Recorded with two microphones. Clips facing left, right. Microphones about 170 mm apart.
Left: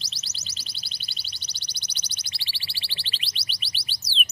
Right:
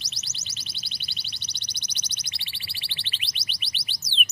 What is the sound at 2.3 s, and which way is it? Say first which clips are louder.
Alarm: left 1 dB; 30° left (ahead or behind).